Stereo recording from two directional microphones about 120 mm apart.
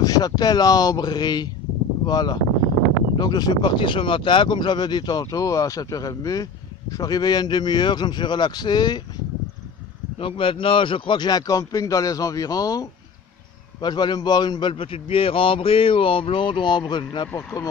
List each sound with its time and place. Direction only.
0.0 s speech: 35° left (ahead or behind)
10.1 s a man's voice: 50° left (ahead or behind)
17.3 s speech: 15° left (ahead or behind)